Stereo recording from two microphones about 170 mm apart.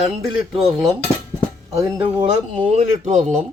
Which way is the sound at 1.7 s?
30° right (ahead or behind).